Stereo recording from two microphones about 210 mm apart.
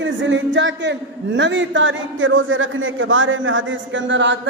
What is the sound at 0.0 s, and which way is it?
A man's voice, 60° right (ahead or behind).